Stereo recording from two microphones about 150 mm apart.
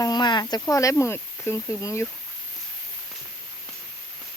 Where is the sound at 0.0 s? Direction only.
30° left (ahead or behind).